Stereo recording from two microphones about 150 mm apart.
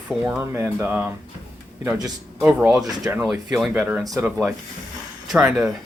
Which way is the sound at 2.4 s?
10° right (ahead or behind).